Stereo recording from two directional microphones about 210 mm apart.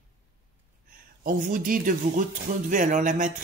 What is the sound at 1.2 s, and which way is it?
Speech, 40° right (ahead or behind).